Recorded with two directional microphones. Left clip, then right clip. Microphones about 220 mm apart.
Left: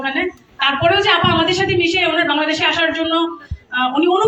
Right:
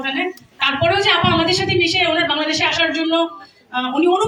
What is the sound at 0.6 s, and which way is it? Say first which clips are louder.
A man's voice: left 2 dB; 60° right (ahead or behind).